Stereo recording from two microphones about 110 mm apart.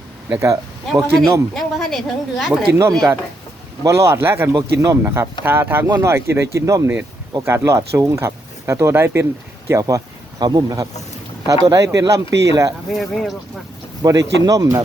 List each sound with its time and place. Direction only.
0.3 s speech: 25° right (ahead or behind)
1.5 s a woman's voice: 5° left (ahead or behind)
3.8 s a man's voice: 25° right (ahead or behind)
12.9 s speech: centre (ahead or behind)
14.0 s a man's voice: 35° right (ahead or behind)